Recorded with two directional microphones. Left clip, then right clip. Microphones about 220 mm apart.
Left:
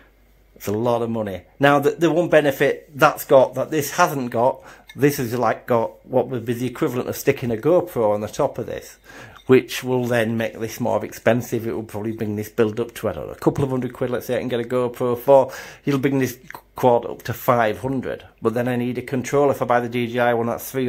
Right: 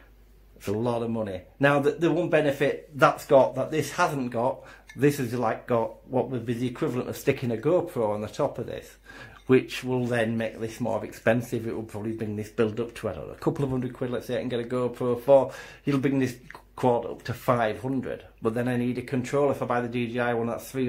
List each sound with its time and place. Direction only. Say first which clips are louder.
0.7 s speech: left 7 dB; 45° left (ahead or behind)